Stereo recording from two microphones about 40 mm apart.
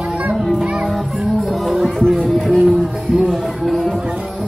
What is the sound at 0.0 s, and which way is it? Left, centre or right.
Children playing, right.